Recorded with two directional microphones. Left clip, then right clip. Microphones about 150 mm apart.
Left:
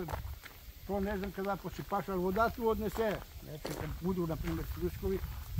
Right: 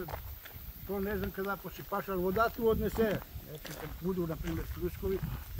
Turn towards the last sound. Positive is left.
turn(degrees=-10)  # may be behind; listen again after turning